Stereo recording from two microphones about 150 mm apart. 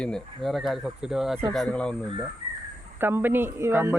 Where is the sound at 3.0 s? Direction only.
15° right (ahead or behind).